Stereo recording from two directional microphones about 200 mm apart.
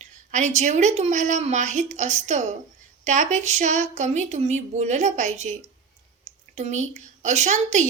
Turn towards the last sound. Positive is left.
turn(degrees=-35)  # may be behind; listen again after turning